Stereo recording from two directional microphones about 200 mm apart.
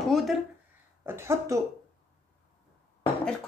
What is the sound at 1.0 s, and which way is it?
Speech, 15° right (ahead or behind).